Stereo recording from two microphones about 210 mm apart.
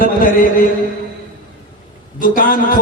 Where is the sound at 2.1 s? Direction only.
40° left (ahead or behind).